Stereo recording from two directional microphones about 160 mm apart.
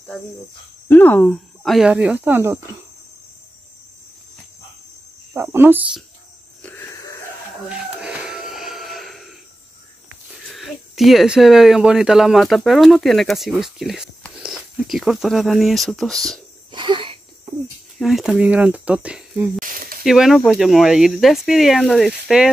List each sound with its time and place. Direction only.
0.8 s speech: 10° left (ahead or behind); by 2.6 s 15° right (ahead or behind)
5.3 s speech: 15° right (ahead or behind)
6.6 s wheeze: 15° left (ahead or behind)
8.0 s a sound: 5° right (ahead or behind)
10.5 s speech: centre (ahead or behind)
16.7 s insect: 30° right (ahead or behind)
17.9 s speech: centre (ahead or behind)
19.6 s sizzle: 60° right (ahead or behind)
20.0 s speech: centre (ahead or behind)